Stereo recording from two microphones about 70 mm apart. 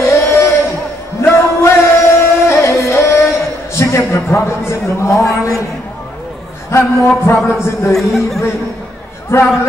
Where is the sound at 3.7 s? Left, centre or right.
Left.